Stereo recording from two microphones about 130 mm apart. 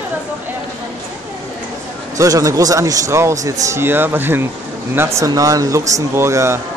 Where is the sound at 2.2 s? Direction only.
25° right (ahead or behind).